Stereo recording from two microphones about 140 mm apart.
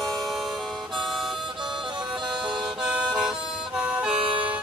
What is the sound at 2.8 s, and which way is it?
Harmonica, 5° right (ahead or behind).